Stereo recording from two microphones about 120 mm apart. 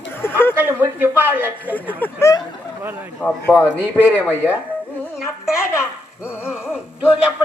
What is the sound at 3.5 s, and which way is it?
A man's voice, 10° right (ahead or behind).